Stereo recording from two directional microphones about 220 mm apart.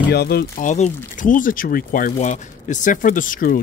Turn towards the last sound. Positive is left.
turn(degrees=40)  # may be behind; listen again after turning